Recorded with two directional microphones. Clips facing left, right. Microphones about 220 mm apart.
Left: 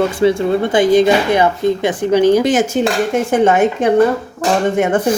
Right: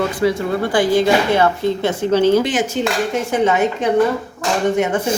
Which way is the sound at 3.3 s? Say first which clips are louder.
Left 4 dB; 50° left (ahead or behind).